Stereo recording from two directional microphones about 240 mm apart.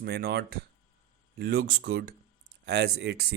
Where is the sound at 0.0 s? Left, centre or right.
Right.